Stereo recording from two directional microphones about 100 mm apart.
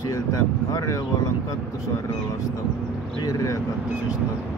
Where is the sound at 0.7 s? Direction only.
35° left (ahead or behind).